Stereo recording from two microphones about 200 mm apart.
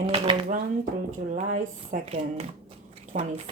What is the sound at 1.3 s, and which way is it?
Speech, 40° right (ahead or behind).